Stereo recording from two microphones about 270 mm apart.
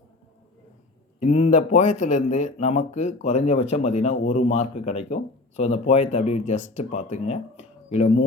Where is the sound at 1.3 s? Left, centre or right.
Left.